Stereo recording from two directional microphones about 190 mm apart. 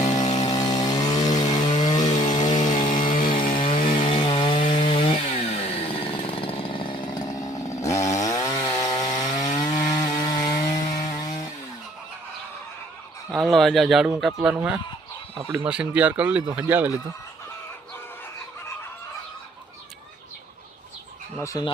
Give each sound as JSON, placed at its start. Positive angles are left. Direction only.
{"t": 0.3, "sound": "chainsaw", "side_deg": 20}
{"t": 2.5, "sound": "chainsaw", "side_deg": 40}
{"t": 3.8, "sound": "chainsaw", "side_deg": 25}
{"t": 4.5, "sound": "wood", "side_deg": 40}
{"t": 4.9, "sound": "chainsaw", "side_deg": 30}
{"t": 13.3, "sound": "speech", "side_deg": 0}
{"t": 21.4, "sound": "speech", "side_deg": 20}